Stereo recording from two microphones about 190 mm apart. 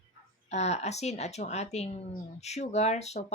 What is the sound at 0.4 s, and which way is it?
A woman's voice, 35° left (ahead or behind).